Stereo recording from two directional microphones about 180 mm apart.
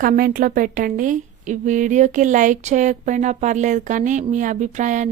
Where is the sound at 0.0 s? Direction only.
50° right (ahead or behind).